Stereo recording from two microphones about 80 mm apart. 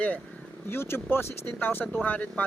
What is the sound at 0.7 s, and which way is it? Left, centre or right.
Speech, left.